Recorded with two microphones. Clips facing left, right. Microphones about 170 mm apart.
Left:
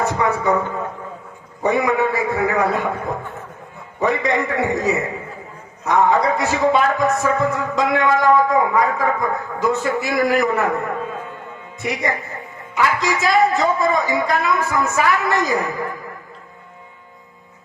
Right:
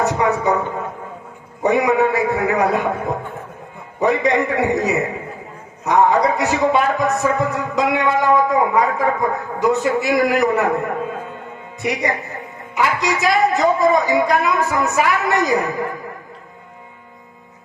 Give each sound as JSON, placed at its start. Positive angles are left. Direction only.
{"t": 0.0, "sound": "a man's voice", "side_deg": -20}
{"t": 4.2, "sound": "a man's voice", "side_deg": -20}